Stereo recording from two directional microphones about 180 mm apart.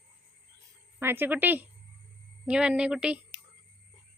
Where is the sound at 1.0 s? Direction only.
10° right (ahead or behind).